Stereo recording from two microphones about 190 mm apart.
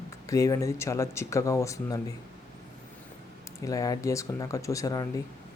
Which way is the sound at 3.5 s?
20° left (ahead or behind).